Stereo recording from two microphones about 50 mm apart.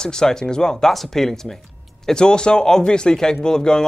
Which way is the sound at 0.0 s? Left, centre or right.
Centre.